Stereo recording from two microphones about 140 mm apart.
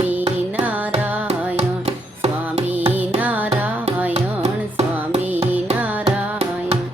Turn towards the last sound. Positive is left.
turn(degrees=-15)  # may be behind; listen again after turning